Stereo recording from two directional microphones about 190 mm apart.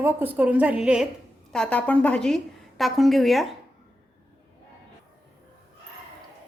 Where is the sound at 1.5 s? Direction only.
5° left (ahead or behind).